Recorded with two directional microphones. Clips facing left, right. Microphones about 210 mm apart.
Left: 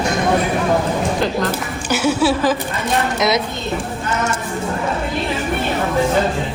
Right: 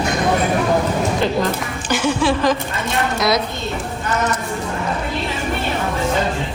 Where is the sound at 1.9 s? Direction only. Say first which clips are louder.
Left 2 dB; 5° left (ahead or behind).